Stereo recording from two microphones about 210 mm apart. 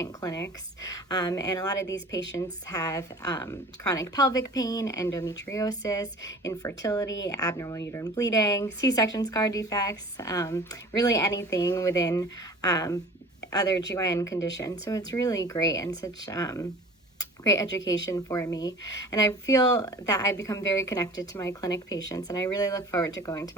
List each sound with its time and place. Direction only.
0.0 s speech: 15° left (ahead or behind)